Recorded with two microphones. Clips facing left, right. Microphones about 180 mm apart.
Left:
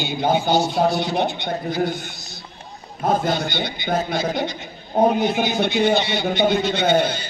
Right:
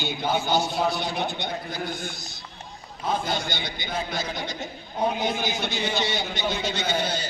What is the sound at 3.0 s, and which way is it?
A man's voice, 50° left (ahead or behind).